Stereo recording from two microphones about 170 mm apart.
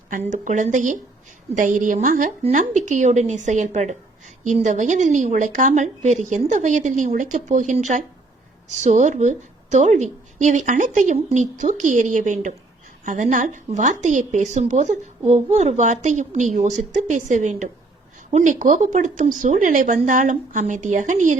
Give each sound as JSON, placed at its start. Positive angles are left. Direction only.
{"t": 0.3, "sound": "a woman's voice", "side_deg": -45}